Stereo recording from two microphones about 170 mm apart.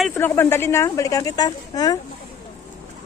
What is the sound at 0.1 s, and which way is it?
Speech, 15° left (ahead or behind).